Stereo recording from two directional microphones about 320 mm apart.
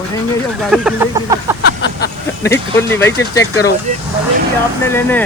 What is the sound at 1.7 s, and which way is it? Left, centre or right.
Vehicle, left.